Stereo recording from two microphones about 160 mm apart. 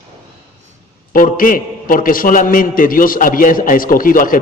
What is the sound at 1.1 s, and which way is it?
A man's voice, 60° left (ahead or behind).